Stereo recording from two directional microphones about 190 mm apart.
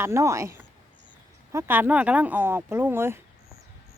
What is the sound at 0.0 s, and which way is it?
Speech, 15° right (ahead or behind).